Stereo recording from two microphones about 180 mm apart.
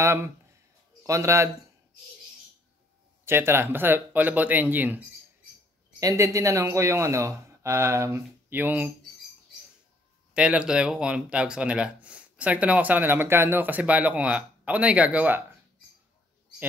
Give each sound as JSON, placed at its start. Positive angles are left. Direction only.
{"t": 0.0, "sound": "a sound", "side_deg": -15}
{"t": 1.0, "sound": "speech", "side_deg": -15}
{"t": 3.3, "sound": "speech", "side_deg": -15}
{"t": 10.3, "sound": "speech", "side_deg": -5}